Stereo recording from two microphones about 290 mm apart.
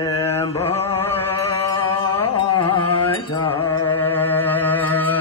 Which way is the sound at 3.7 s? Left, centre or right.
Left.